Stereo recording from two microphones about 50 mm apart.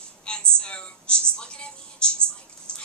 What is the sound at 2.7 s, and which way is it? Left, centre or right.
Dog, centre.